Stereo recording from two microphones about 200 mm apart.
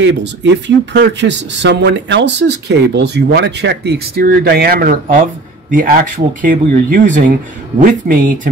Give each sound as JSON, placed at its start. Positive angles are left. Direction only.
{"t": 0.0, "sound": "speech", "side_deg": -65}